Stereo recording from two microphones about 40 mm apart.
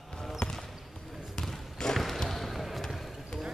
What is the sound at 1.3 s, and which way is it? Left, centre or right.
Basketball bounce, centre.